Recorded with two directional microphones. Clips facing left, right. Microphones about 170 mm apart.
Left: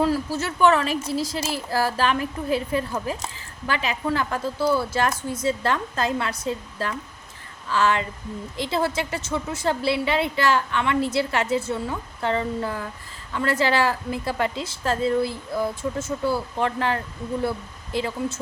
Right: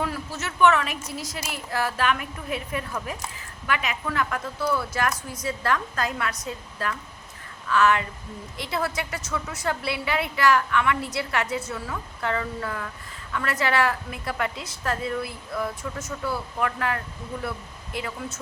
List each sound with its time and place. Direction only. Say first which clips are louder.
0.0 s a woman's voice: left 7 dB; 35° left (ahead or behind)